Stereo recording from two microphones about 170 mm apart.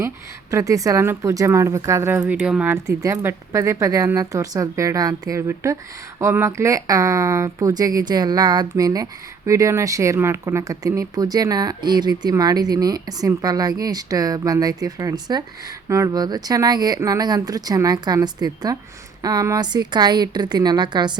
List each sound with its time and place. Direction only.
0.5 s speech: 20° right (ahead or behind)